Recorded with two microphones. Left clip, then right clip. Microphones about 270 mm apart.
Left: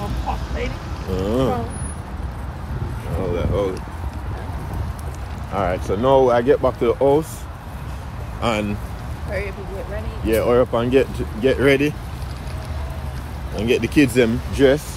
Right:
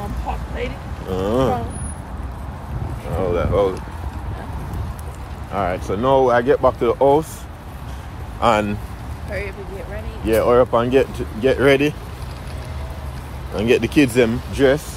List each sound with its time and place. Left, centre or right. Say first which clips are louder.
1.1 s speech: right 2 dB; centre
3.3 s speech: right 4 dB; centre
5.5 s speech: even; centre
8.4 s speech: right 6 dB; centre
10.2 s speech: right 2 dB; centre
13.6 s speech: right 2 dB; centre